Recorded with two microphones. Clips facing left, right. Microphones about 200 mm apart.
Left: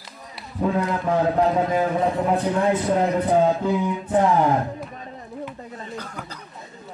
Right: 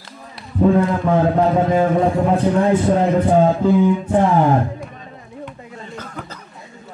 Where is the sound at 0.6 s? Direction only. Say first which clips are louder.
Right 8 dB; 25° right (ahead or behind).